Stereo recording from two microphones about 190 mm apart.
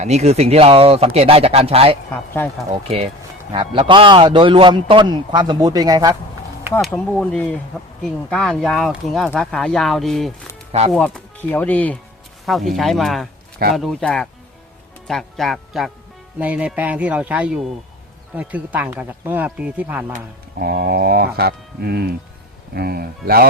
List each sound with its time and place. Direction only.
0.0 s speech: 35° right (ahead or behind)
2.0 s speech: 10° left (ahead or behind)
2.6 s a man's voice: 35° right (ahead or behind)
6.9 s speech: 5° left (ahead or behind)
10.7 s speech: 35° right (ahead or behind)
10.9 s speech: 5° left (ahead or behind)
20.6 s speech: 55° right (ahead or behind)